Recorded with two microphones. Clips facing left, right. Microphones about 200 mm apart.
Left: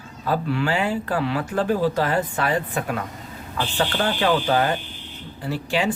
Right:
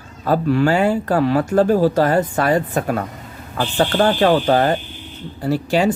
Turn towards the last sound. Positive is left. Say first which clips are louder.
# right 6 dB
turn(degrees=-40)  # may be behind; listen again after turning